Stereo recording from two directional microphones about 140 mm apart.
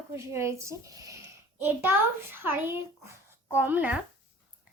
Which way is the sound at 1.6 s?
15° right (ahead or behind).